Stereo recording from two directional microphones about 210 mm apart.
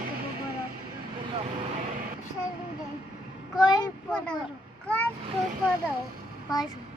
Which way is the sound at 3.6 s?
20° left (ahead or behind).